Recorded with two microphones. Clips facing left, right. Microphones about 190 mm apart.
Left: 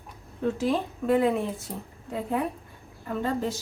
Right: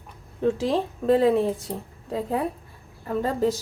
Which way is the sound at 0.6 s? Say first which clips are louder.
Right 2 dB; 30° right (ahead or behind).